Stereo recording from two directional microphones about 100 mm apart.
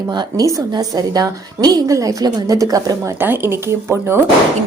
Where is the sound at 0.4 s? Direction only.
35° right (ahead or behind).